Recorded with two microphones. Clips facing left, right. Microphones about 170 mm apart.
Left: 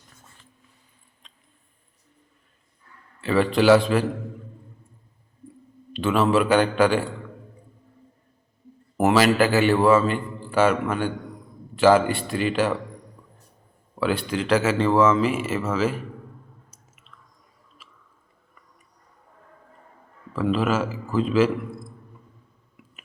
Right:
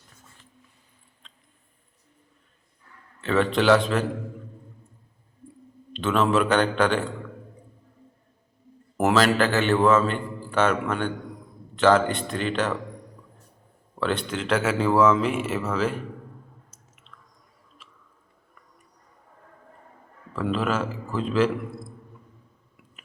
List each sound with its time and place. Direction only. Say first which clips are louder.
1.2 s a sound: right 1 dB; 15° left (ahead or behind)
3.2 s a man's voice: left 2 dB; 5° left (ahead or behind)
5.9 s a man's voice: left 2 dB; 5° left (ahead or behind)
9.0 s a man's voice: left 2 dB; 5° left (ahead or behind)
14.0 s a man's voice: left 2 dB; 5° left (ahead or behind)
16.7 s squish: even; 5° left (ahead or behind)
20.3 s a man's voice: left 3 dB; 5° left (ahead or behind)